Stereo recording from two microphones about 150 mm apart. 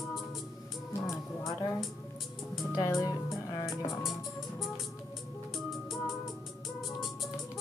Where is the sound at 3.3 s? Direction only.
Centre (ahead or behind).